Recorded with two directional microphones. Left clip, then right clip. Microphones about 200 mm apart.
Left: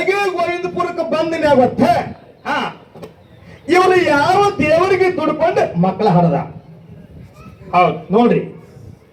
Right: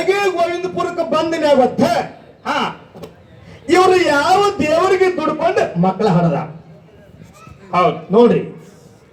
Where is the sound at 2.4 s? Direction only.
30° left (ahead or behind).